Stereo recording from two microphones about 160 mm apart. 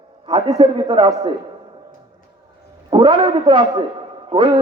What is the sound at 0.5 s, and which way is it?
Speech, 30° right (ahead or behind).